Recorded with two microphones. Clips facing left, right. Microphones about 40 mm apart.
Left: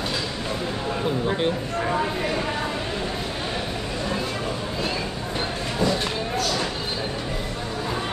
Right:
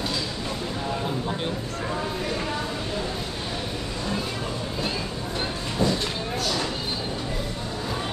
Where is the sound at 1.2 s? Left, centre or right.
Left.